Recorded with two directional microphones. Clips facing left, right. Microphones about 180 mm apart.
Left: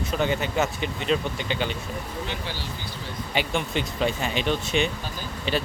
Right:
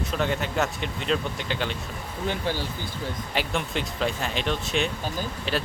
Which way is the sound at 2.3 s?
50° right (ahead or behind).